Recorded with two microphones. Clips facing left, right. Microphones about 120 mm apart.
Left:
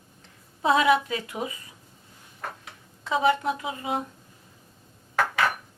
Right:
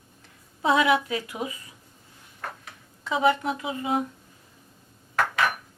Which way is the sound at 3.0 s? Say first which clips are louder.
Even; 25° left (ahead or behind).